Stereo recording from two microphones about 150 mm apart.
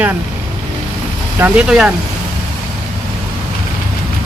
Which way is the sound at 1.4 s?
5° right (ahead or behind).